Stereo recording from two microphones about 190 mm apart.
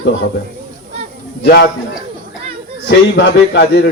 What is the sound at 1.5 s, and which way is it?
Speech, 60° left (ahead or behind).